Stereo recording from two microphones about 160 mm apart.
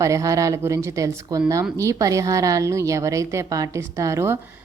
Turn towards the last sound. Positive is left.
turn(degrees=-15)  # may be behind; listen again after turning